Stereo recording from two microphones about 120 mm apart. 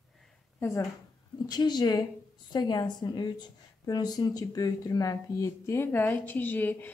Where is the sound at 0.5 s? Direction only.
20° left (ahead or behind).